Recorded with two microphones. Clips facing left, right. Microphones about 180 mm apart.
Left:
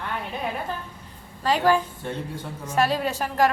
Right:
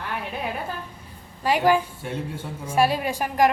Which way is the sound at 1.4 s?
10° right (ahead or behind).